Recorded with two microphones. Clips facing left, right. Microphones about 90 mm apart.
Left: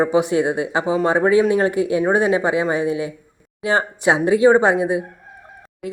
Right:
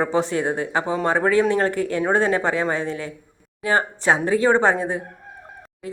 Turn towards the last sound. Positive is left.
turn(degrees=15)  # may be behind; listen again after turning